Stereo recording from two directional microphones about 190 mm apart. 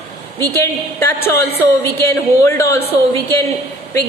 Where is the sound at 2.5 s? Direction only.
15° left (ahead or behind).